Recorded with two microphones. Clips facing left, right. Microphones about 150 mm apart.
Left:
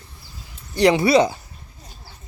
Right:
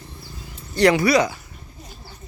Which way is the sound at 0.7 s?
20° left (ahead or behind).